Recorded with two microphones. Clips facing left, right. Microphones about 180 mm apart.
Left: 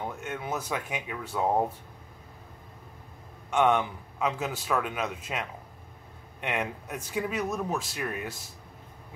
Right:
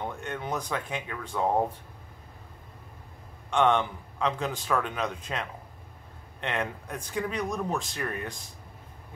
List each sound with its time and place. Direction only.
0.0 s a man's voice: 5° left (ahead or behind)
3.4 s a man's voice: 10° left (ahead or behind)